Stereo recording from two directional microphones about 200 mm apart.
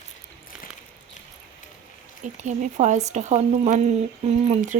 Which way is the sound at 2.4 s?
35° right (ahead or behind).